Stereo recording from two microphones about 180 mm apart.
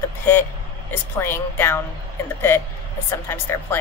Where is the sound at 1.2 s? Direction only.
10° left (ahead or behind).